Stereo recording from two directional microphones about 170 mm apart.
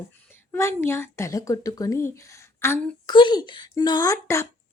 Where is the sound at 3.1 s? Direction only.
25° left (ahead or behind).